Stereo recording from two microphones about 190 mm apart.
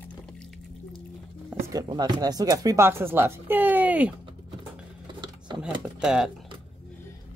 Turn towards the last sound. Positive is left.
turn(degrees=-5)  # may be behind; listen again after turning